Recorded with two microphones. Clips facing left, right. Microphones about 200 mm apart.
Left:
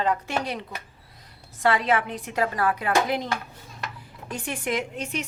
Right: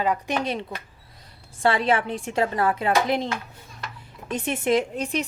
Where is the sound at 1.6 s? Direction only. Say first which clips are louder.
Right 1 dB; 30° right (ahead or behind).